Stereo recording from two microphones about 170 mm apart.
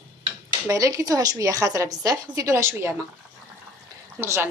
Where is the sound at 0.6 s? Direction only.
20° right (ahead or behind).